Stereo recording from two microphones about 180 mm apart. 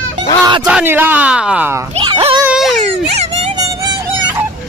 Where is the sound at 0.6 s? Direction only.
10° right (ahead or behind).